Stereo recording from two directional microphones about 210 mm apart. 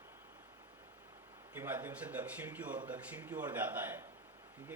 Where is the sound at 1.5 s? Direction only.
10° right (ahead or behind).